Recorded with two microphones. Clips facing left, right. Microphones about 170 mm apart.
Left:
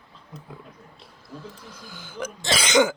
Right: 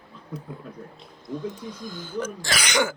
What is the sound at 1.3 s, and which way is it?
Speech, 5° left (ahead or behind).